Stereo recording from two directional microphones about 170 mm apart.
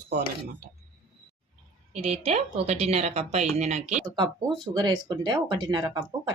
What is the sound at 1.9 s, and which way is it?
A woman's voice, 35° right (ahead or behind).